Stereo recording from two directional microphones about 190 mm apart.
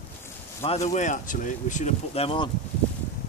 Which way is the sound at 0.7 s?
35° left (ahead or behind).